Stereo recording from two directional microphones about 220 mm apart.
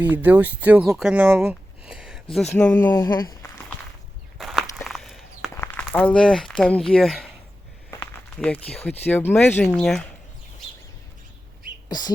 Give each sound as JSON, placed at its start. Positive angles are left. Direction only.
{"t": 0.0, "sound": "speech", "side_deg": -10}
{"t": 4.4, "sound": "walk", "side_deg": 0}
{"t": 5.5, "sound": "speech", "side_deg": 5}
{"t": 11.9, "sound": "bird", "side_deg": 20}